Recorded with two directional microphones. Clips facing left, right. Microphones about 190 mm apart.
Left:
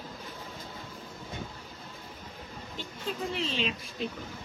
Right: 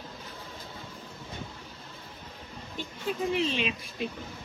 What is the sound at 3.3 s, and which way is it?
Speech, 15° right (ahead or behind).